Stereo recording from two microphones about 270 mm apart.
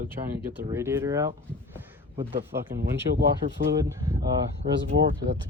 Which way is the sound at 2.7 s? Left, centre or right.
Right.